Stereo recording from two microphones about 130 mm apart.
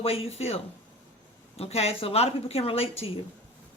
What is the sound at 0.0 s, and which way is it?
A woman's voice, 50° left (ahead or behind).